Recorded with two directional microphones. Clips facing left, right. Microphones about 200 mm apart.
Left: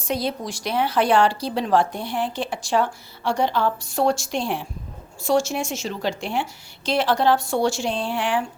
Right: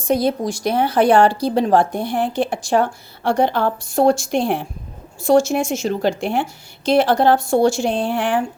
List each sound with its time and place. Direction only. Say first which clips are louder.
0.0 s speech: right 7 dB; 50° right (ahead or behind)